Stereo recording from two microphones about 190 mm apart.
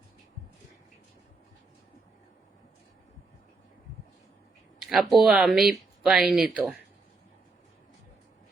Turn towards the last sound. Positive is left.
turn(degrees=-5)  # may be behind; listen again after turning